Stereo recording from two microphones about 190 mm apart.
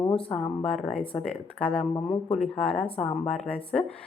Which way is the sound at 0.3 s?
5° left (ahead or behind).